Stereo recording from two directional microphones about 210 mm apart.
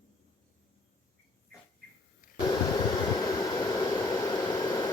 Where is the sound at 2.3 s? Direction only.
15° left (ahead or behind).